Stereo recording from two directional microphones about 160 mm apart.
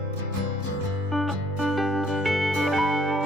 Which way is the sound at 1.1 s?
Centre (ahead or behind).